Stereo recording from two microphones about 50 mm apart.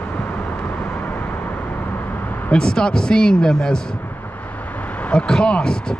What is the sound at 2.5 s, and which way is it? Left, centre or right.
A man's voice, centre.